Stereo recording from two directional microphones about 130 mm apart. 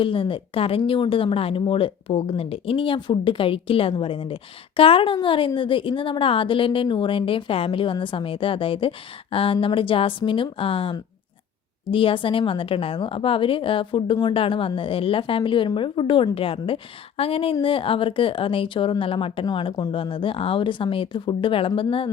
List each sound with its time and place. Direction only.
0.0 s a woman's voice: 40° left (ahead or behind)